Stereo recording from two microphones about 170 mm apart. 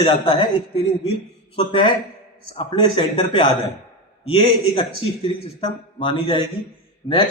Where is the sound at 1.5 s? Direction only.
30° left (ahead or behind).